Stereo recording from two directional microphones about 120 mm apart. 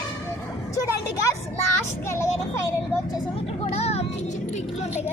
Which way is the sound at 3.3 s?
55° left (ahead or behind).